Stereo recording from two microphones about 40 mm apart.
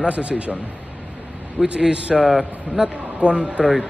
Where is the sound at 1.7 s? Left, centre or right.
Right.